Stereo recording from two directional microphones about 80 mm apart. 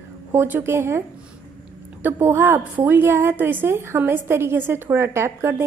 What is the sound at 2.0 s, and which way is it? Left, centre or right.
A woman's voice, right.